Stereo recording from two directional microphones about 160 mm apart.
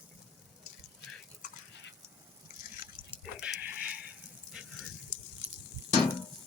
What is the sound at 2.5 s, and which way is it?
Drip, 55° left (ahead or behind).